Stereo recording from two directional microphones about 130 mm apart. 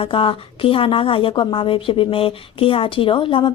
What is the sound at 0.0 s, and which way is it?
A woman's voice, 45° left (ahead or behind).